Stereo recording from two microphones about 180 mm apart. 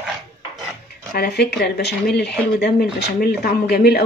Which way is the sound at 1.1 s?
60° left (ahead or behind).